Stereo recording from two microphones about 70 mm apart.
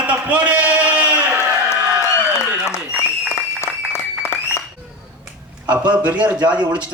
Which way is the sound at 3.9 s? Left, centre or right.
Left.